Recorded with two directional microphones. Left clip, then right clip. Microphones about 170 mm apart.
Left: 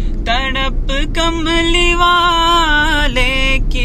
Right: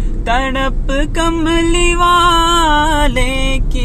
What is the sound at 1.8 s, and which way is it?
Music, 35° right (ahead or behind).